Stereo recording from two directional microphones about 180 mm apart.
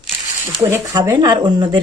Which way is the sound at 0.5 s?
20° right (ahead or behind).